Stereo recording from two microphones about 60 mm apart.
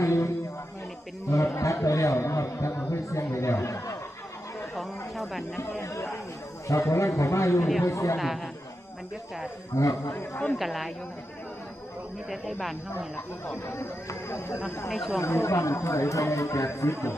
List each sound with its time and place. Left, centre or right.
0.0 s music: left
1.3 s speech: left
4.7 s speech: centre
5.6 s speech: left
8.2 s speech: centre
9.8 s speech: left
10.5 s speech: centre
12.3 s speech: centre
14.9 s speech: centre
15.1 s speech: left